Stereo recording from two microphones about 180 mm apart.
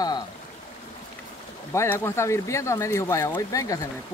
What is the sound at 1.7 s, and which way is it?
Speech, 15° left (ahead or behind).